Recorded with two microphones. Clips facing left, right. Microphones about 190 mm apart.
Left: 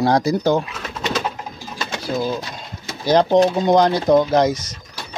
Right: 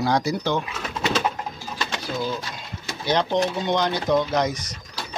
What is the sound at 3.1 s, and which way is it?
Speech, 40° left (ahead or behind).